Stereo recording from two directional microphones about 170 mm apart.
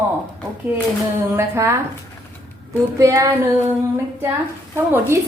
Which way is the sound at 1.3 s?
15° right (ahead or behind).